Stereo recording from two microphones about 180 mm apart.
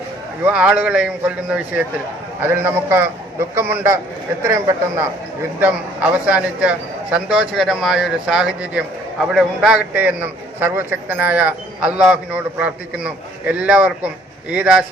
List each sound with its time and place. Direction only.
0.4 s a man's voice: 5° right (ahead or behind)